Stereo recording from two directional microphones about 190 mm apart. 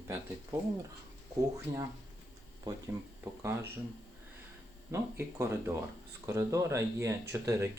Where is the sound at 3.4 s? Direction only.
15° right (ahead or behind).